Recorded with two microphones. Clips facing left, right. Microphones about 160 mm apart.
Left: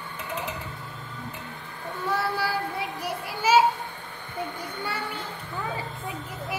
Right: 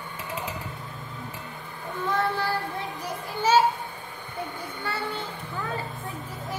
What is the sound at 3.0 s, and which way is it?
Children playing, 10° left (ahead or behind).